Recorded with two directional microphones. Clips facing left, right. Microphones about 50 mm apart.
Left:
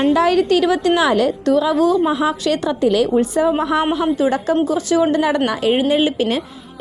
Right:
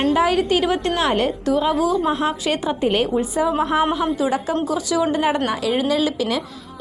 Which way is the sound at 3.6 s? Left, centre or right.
Left.